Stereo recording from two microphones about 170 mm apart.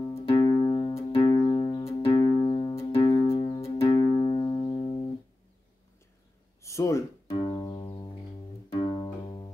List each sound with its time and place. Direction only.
0.0 s music: 30° left (ahead or behind)
2.1 s music: 20° left (ahead or behind)
6.6 s a sound: 15° left (ahead or behind)
7.4 s music: 25° left (ahead or behind)
8.8 s music: 25° left (ahead or behind)